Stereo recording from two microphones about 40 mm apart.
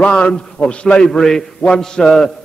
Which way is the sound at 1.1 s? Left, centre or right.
Centre.